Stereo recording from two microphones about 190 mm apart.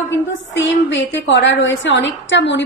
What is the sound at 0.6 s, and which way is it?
A woman's voice, 70° left (ahead or behind).